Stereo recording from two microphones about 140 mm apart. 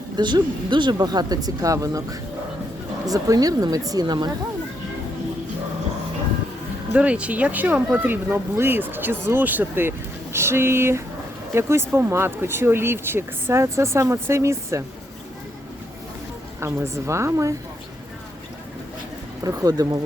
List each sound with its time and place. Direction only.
0.2 s speech: 35° right (ahead or behind)
6.9 s speech: 10° right (ahead or behind)
16.6 s speech: 20° right (ahead or behind)
19.5 s speech: 25° right (ahead or behind)